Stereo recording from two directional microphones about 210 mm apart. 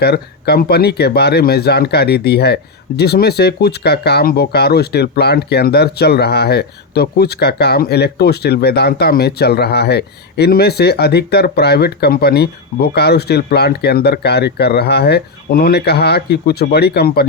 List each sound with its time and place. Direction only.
0.0 s speech: 50° left (ahead or behind)